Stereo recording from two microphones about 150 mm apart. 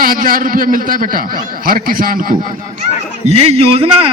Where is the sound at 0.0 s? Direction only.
70° right (ahead or behind).